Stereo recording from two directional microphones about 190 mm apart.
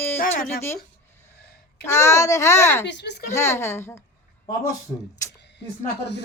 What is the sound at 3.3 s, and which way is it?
Speech, 15° left (ahead or behind).